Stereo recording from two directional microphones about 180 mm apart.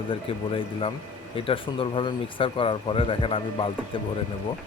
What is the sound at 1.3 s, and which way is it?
Speech, 30° left (ahead or behind).